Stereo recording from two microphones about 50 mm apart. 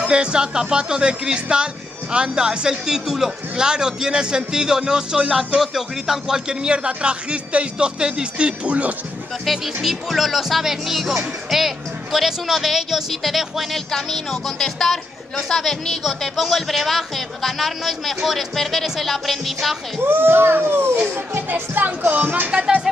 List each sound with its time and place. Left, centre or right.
0.0 s a man's voice: centre
9.5 s speech: centre
20.0 s speech: right